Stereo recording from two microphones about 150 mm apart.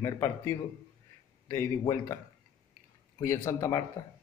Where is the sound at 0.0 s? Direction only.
20° left (ahead or behind).